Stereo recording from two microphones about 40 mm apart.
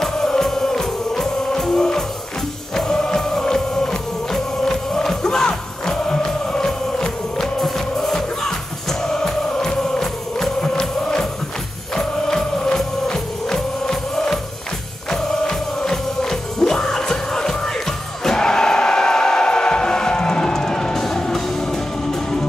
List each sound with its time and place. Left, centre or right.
0.0 s music: centre